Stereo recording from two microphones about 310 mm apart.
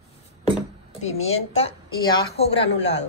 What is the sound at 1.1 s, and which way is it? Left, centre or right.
A woman's voice, centre.